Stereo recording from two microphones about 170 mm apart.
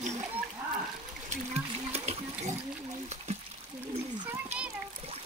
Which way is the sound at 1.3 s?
40° right (ahead or behind).